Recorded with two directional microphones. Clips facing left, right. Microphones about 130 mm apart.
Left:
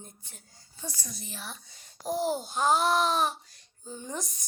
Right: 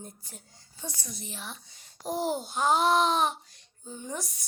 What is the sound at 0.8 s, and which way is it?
A woman's voice, 20° right (ahead or behind).